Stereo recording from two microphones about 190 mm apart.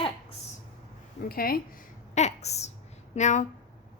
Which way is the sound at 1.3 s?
50° left (ahead or behind).